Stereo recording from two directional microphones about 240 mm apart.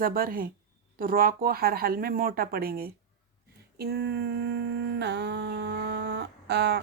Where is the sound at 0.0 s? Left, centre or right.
Right.